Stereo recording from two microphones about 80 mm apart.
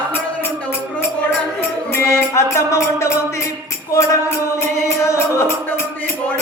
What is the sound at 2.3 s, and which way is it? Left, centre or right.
Music, left.